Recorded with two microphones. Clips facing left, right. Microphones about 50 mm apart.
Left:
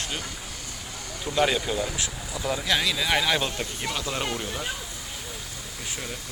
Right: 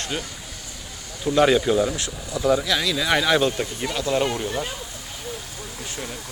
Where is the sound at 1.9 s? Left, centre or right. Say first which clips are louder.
Right 3 dB; centre.